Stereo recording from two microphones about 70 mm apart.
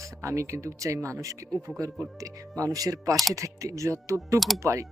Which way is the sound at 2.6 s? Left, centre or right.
Right.